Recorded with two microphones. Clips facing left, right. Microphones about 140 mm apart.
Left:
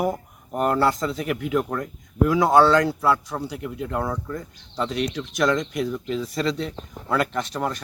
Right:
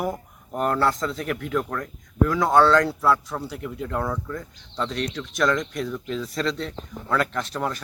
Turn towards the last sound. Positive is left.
turn(degrees=0)  # may be behind; listen again after turning